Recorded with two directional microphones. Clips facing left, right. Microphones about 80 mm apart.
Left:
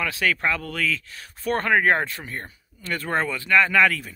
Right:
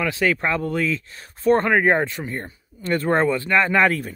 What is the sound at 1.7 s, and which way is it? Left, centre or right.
Speech, centre.